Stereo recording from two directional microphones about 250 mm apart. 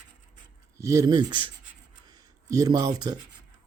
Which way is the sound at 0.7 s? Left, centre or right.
Centre.